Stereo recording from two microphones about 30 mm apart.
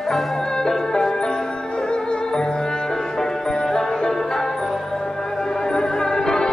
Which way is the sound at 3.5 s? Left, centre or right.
Left.